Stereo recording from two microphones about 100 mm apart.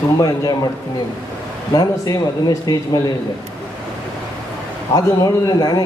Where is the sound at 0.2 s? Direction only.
40° left (ahead or behind).